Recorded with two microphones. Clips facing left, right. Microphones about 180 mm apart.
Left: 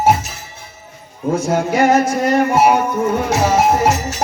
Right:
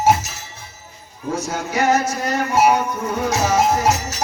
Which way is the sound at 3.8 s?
55° left (ahead or behind).